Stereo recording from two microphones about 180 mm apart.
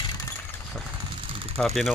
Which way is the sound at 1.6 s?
5° left (ahead or behind).